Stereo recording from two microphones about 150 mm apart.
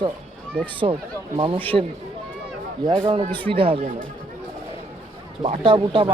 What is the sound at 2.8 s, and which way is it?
A man's voice, 30° right (ahead or behind).